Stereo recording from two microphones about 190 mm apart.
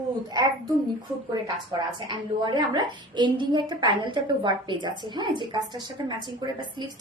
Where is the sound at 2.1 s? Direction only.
20° right (ahead or behind).